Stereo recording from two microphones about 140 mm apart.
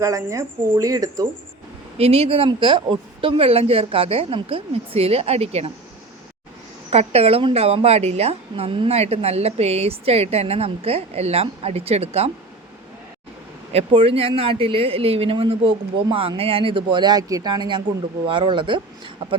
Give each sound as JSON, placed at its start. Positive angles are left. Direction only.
{"t": 0.0, "sound": "speech", "side_deg": -20}
{"t": 2.0, "sound": "a woman's voice", "side_deg": -45}
{"t": 6.9, "sound": "a woman's voice", "side_deg": -45}
{"t": 13.7, "sound": "speech", "side_deg": -40}